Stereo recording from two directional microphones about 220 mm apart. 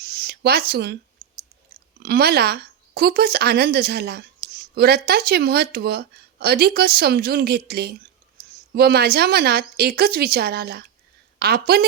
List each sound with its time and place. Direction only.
0.0 s a sound: 45° right (ahead or behind)
0.7 s speech: 50° right (ahead or behind)
1.2 s clicking: 45° right (ahead or behind)
2.0 s a woman's voice: 45° right (ahead or behind)
8.4 s a sound: 45° right (ahead or behind)
8.7 s speech: 45° right (ahead or behind)